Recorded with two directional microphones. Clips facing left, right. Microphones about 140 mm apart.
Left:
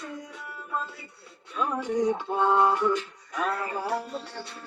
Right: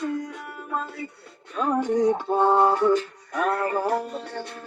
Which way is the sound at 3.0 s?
55° right (ahead or behind).